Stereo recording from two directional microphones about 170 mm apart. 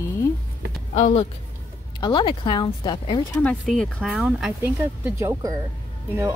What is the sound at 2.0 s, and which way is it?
Speech, 25° left (ahead or behind).